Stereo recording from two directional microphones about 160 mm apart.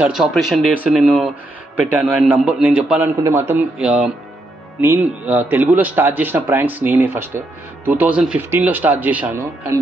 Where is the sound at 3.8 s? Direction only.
5° right (ahead or behind).